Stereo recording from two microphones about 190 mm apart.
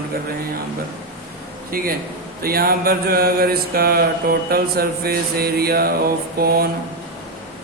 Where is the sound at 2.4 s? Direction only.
50° right (ahead or behind).